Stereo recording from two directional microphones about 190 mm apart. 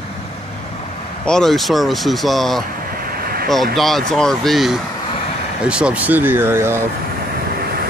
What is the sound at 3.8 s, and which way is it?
Speech, centre (ahead or behind).